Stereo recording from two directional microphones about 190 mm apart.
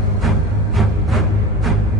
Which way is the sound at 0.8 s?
Centre (ahead or behind).